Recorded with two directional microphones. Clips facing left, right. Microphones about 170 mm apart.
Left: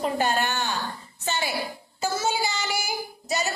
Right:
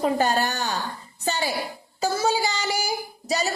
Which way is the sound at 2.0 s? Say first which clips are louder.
Right 3 dB; 35° right (ahead or behind).